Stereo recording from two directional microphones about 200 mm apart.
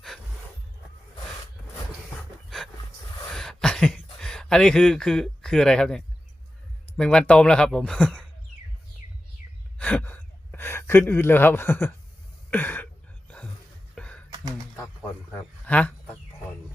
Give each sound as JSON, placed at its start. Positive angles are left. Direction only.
{"t": 2.1, "sound": "dog", "side_deg": 0}
{"t": 3.3, "sound": "a sound", "side_deg": 0}
{"t": 6.9, "sound": "speech", "side_deg": 5}
{"t": 9.7, "sound": "gasp", "side_deg": 5}
{"t": 12.5, "sound": "a sound", "side_deg": 10}
{"t": 15.6, "sound": "speech", "side_deg": 5}